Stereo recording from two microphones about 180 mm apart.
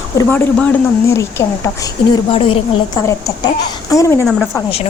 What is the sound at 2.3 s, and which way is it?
Speech, 30° left (ahead or behind).